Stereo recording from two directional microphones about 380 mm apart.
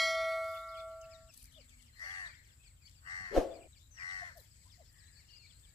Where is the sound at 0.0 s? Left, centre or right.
Centre.